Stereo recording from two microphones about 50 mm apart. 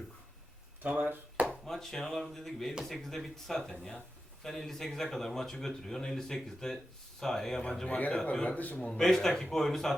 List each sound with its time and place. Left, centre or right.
0.8 s a sound: right
1.6 s speech: centre
8.4 s a man's voice: left
8.8 s speech: centre